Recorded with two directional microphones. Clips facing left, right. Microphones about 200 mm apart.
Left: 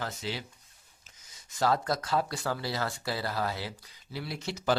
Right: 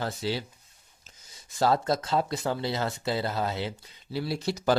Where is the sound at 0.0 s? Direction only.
30° right (ahead or behind).